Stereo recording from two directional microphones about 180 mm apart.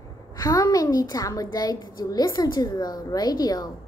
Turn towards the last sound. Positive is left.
turn(degrees=20)  # may be behind; listen again after turning